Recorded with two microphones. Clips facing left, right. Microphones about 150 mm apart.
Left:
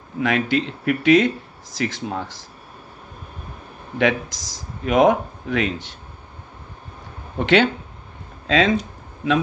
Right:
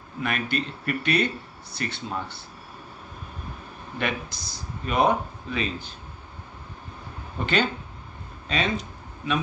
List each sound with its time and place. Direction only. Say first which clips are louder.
0.2 s speech: left 8 dB; 90° left
4.0 s speech: left 9 dB; 90° left
7.3 s speech: left 8 dB; 90° left